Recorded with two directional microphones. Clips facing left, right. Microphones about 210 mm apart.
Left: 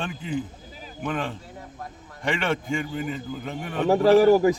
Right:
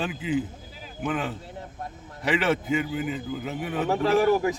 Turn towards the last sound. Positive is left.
turn(degrees=35)  # may be behind; listen again after turning